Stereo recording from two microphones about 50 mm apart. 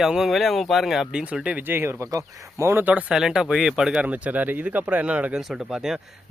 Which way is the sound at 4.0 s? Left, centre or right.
Right.